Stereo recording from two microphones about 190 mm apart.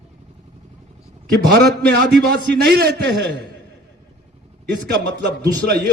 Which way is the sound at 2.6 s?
60° right (ahead or behind).